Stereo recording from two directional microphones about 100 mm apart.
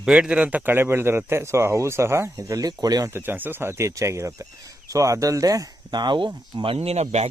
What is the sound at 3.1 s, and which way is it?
Speech, 20° right (ahead or behind).